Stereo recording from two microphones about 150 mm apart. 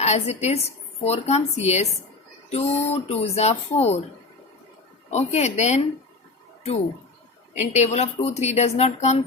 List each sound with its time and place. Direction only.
0.0 s a woman's voice: 50° left (ahead or behind)
5.1 s speech: 50° left (ahead or behind)
7.7 s speech: 50° left (ahead or behind)